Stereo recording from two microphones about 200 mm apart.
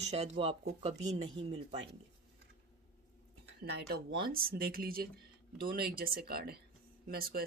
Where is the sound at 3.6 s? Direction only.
55° right (ahead or behind).